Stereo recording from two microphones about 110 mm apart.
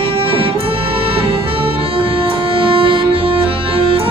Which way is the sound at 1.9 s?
55° right (ahead or behind).